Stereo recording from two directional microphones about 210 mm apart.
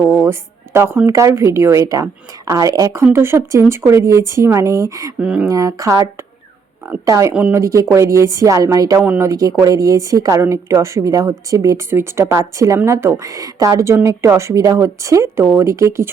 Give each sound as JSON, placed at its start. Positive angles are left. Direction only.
{"t": 0.0, "sound": "a sound", "side_deg": -10}
{"t": 1.0, "sound": "a woman's voice", "side_deg": -15}
{"t": 5.5, "sound": "a woman's voice", "side_deg": -15}